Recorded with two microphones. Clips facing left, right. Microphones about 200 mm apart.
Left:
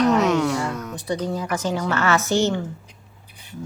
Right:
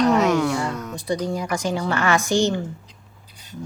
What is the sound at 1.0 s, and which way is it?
A woman's voice, 10° right (ahead or behind).